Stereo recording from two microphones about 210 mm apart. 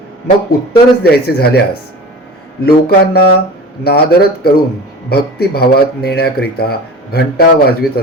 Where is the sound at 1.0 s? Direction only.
50° left (ahead or behind).